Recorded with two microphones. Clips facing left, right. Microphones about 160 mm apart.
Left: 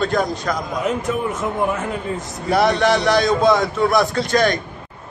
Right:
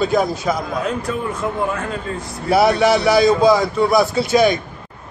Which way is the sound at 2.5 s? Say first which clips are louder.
Right 2 dB; 5° right (ahead or behind).